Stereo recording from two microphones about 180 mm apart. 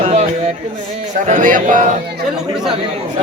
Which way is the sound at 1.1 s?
45° right (ahead or behind).